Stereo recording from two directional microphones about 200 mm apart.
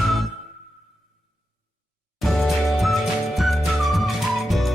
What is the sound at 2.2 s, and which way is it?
Music, centre (ahead or behind).